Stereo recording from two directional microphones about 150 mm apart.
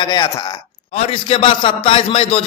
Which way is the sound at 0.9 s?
40° left (ahead or behind).